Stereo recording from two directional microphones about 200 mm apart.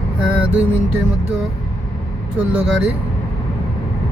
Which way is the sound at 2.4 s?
5° right (ahead or behind).